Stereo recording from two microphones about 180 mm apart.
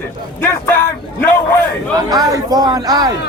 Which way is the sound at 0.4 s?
15° left (ahead or behind).